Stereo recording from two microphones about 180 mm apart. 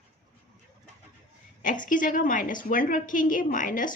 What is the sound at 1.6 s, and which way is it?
Speech, 45° left (ahead or behind).